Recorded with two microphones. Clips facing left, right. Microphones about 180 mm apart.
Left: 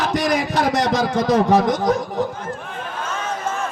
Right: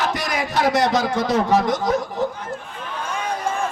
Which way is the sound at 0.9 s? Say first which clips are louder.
Left 2 dB; 45° left (ahead or behind).